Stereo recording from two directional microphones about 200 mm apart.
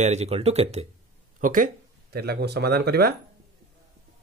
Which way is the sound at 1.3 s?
40° right (ahead or behind).